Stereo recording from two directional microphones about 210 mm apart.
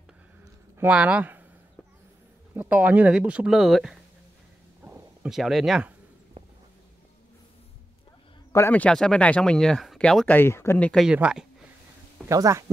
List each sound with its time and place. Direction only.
0.7 s speech: 5° right (ahead or behind)
2.5 s speech: 10° right (ahead or behind)
4.8 s a sound: 5° right (ahead or behind)
8.5 s speech: 10° left (ahead or behind)
12.3 s speech: 15° right (ahead or behind)